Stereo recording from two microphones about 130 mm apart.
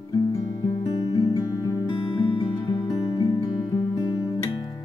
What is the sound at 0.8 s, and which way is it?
Music, 30° left (ahead or behind).